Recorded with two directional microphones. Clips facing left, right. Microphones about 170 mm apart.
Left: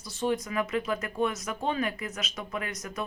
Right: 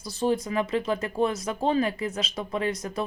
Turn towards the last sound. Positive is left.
turn(degrees=-30)  # may be behind; listen again after turning